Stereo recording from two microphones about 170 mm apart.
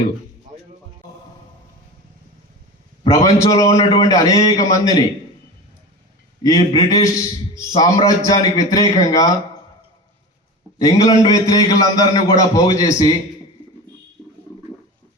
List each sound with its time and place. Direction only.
3.1 s a man's voice: 20° left (ahead or behind)
6.4 s a man's voice: 20° left (ahead or behind)
10.8 s a man's voice: 20° left (ahead or behind)